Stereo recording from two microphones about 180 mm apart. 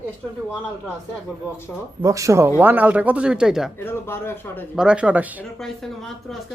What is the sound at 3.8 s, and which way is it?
Speech, 10° left (ahead or behind).